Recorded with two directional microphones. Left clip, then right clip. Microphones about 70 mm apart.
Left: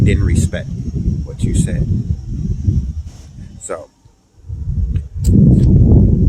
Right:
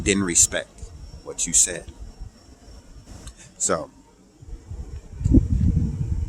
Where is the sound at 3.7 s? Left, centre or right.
Right.